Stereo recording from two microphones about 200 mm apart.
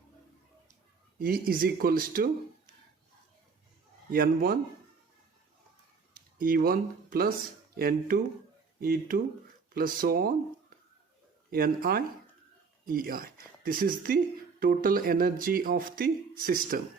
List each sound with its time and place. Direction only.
1.2 s speech: 45° right (ahead or behind)
4.1 s speech: 45° right (ahead or behind)
6.1 s speech: 45° right (ahead or behind)
11.5 s speech: 45° right (ahead or behind)